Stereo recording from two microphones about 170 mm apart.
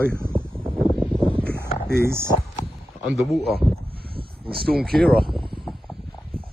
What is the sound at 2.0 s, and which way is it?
Speech, 15° right (ahead or behind).